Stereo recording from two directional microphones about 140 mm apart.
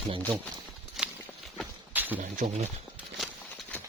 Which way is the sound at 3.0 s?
Centre (ahead or behind).